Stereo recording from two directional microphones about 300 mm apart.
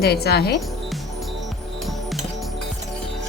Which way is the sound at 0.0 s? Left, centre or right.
Left.